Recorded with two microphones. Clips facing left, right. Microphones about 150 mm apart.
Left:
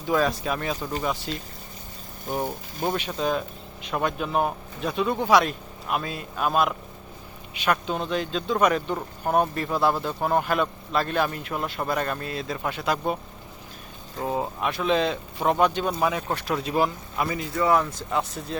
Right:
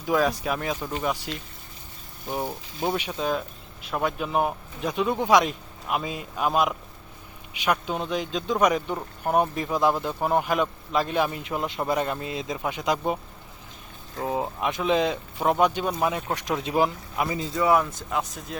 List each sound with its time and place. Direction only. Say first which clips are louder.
0.0 s speech: even; 10° right (ahead or behind)
2.8 s speech: left 1 dB; 10° right (ahead or behind)
14.3 s speech: even; centre (ahead or behind)
14.6 s speech: even; 15° right (ahead or behind)
16.3 s speech: even; 15° right (ahead or behind)
17.3 s speech: right 1 dB; 25° right (ahead or behind)
17.6 s speech: even; 15° right (ahead or behind)
18.1 s speech: left 3 dB; centre (ahead or behind)